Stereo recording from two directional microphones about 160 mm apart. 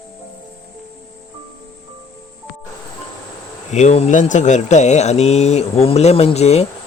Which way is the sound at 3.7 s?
45° left (ahead or behind).